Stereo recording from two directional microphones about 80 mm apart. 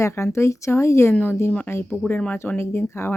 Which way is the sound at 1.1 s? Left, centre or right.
Left.